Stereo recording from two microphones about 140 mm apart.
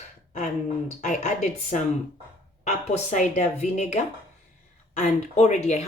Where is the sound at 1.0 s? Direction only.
55° left (ahead or behind).